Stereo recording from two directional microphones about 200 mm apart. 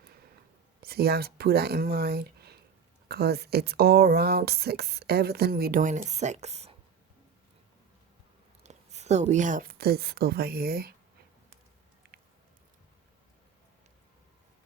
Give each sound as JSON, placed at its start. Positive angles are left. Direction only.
{"t": 0.8, "sound": "speech", "side_deg": -50}
{"t": 8.6, "sound": "speech", "side_deg": -35}
{"t": 12.0, "sound": "a sound", "side_deg": -50}